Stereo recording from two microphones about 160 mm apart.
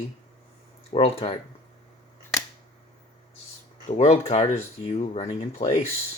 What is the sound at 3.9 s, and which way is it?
Speech, 45° left (ahead or behind).